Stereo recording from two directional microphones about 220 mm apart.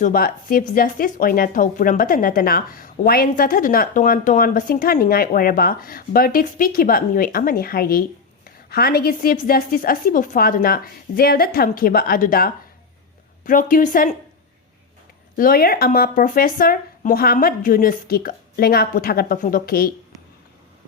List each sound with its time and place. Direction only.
0.0 s a woman's voice: 40° left (ahead or behind)
15.4 s a woman's voice: 40° left (ahead or behind)